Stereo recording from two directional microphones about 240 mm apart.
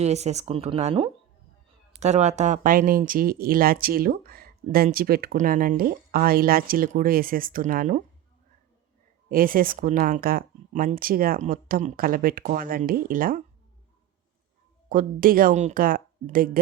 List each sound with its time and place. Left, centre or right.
0.0 s speech: right
9.3 s speech: right
14.8 s speech: right